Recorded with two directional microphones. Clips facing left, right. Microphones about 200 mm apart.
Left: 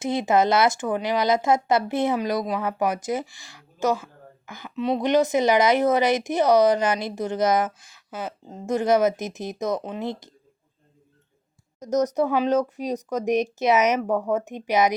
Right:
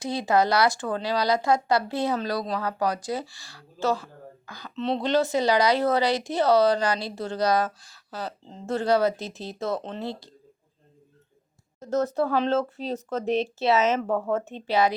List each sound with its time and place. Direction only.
0.0 s speech: 20° left (ahead or behind)
4.7 s speech: 10° left (ahead or behind)
11.8 s speech: 15° left (ahead or behind)